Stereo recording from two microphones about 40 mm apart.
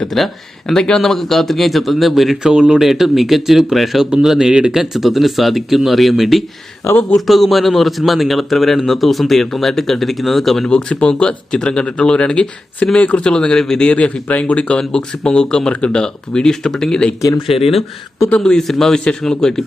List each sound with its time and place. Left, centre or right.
0.1 s speech: centre
2.4 s speech: centre
10.7 s speech: left
13.0 s speech: left
13.2 s speech: centre
14.3 s speech: left
14.8 s speech: centre
18.3 s speech: centre